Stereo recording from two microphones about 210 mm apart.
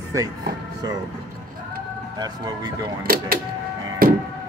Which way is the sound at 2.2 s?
20° right (ahead or behind).